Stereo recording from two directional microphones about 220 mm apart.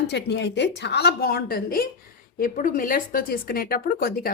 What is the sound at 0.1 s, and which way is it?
Speech, 50° left (ahead or behind).